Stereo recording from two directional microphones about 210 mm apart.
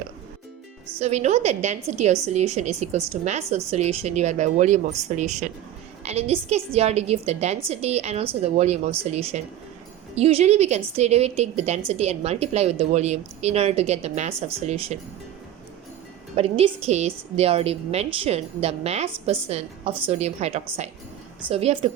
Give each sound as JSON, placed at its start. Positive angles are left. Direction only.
{"t": 0.9, "sound": "a woman's voice", "side_deg": -30}
{"t": 16.3, "sound": "a woman's voice", "side_deg": -25}